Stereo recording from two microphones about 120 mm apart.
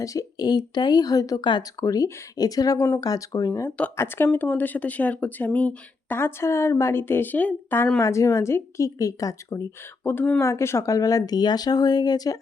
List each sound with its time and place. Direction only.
0.0 s speech: 30° left (ahead or behind)
7.9 s a woman's voice: 25° left (ahead or behind)